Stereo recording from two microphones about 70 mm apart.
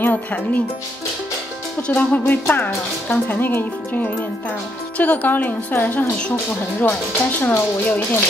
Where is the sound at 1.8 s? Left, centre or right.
Left.